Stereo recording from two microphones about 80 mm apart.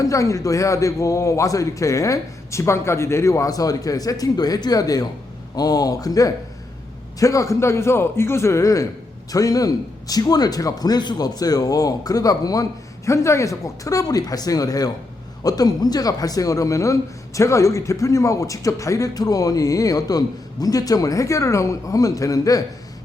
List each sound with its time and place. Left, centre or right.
0.0 s a man's voice: left
13.1 s speech: left